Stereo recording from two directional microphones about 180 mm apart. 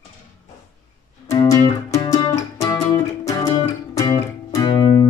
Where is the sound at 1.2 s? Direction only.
15° left (ahead or behind).